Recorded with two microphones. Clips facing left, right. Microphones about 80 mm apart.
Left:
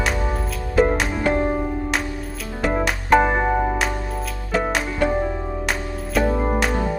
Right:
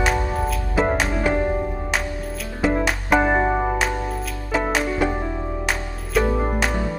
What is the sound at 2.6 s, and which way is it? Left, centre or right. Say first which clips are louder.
Music: left 1 dB; centre.